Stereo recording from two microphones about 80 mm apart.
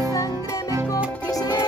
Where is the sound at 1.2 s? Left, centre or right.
Left.